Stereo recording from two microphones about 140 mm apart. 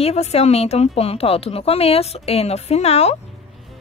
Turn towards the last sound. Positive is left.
turn(degrees=45)  # may be behind; listen again after turning